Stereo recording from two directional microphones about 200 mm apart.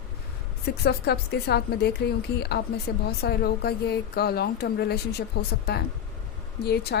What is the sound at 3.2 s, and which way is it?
A woman's voice, 50° left (ahead or behind).